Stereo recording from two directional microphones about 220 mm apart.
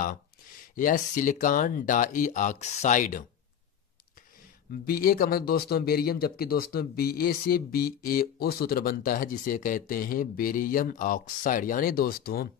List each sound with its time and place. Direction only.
0.7 s speech: 35° left (ahead or behind)
4.8 s speech: 40° left (ahead or behind)